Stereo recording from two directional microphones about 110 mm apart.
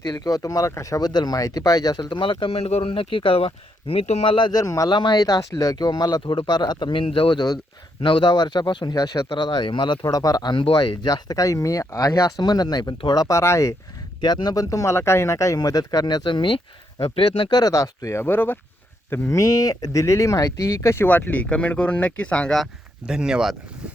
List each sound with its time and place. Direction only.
0.1 s speech: 35° left (ahead or behind); by 4.3 s 75° left (ahead or behind)
4.3 s speech: 45° left (ahead or behind)
4.6 s speech: 30° left (ahead or behind)
4.9 s speech: 45° left (ahead or behind); by 13.7 s 25° left (ahead or behind)
14.2 s speech: 40° left (ahead or behind); by 17.5 s 55° left (ahead or behind)
17.5 s speech: 35° left (ahead or behind); by 18.6 s 20° left (ahead or behind)
19.3 s speech: 30° left (ahead or behind); by 23.6 s 5° right (ahead or behind)